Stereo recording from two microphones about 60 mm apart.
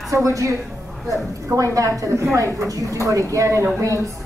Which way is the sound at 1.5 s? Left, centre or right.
Right.